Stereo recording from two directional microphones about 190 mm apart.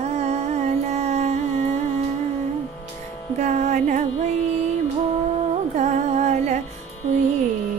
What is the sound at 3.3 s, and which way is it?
Music, 40° right (ahead or behind).